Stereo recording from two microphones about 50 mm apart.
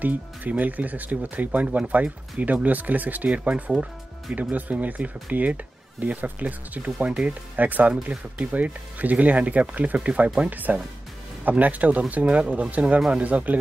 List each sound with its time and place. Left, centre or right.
0.0 s speech: right
7.5 s speech: right